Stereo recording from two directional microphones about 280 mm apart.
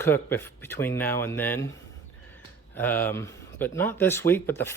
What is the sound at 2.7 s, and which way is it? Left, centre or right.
A man's voice, centre.